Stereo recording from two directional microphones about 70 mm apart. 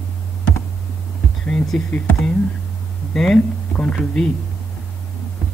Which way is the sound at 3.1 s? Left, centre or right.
Centre.